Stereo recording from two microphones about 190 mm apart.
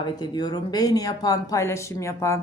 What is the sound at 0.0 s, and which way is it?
Speech, 20° left (ahead or behind).